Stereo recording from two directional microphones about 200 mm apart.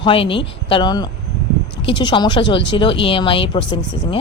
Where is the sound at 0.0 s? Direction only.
25° left (ahead or behind).